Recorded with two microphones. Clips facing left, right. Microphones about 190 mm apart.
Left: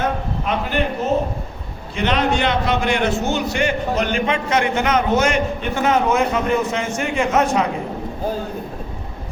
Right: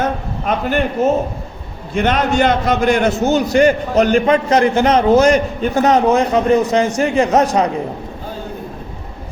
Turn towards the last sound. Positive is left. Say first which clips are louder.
# right 4 dB
turn(degrees=-35)  # may be behind; listen again after turning